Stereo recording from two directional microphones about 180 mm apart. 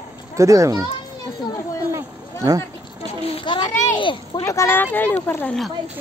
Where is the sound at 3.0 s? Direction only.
30° left (ahead or behind).